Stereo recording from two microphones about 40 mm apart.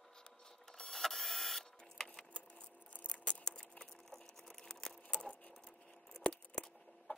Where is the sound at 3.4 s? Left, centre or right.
Left.